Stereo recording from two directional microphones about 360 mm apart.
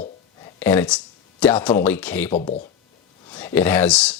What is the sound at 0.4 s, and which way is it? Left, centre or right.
Speech, centre.